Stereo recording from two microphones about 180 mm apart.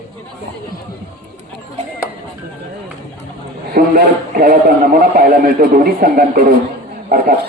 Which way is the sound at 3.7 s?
55° right (ahead or behind).